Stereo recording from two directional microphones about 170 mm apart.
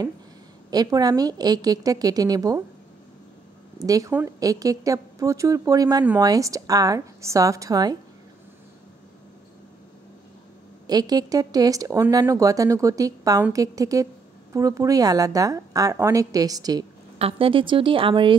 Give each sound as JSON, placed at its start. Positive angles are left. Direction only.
{"t": 0.7, "sound": "speech", "side_deg": -20}
{"t": 3.8, "sound": "speech", "side_deg": -20}
{"t": 10.9, "sound": "speech", "side_deg": -25}
{"t": 17.2, "sound": "speech", "side_deg": -35}